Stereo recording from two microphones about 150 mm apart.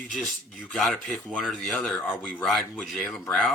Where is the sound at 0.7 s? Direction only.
5° left (ahead or behind).